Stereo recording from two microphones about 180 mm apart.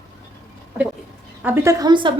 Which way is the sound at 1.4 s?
15° right (ahead or behind).